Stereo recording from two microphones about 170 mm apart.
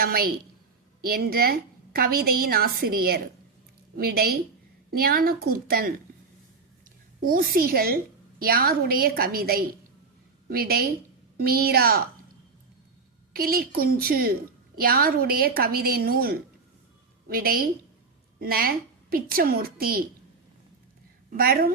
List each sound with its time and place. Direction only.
0.0 s a woman's voice: 60° right (ahead or behind)
7.2 s a woman's voice: 55° right (ahead or behind)
13.3 s a woman's voice: 60° right (ahead or behind)
21.3 s a woman's voice: 60° right (ahead or behind)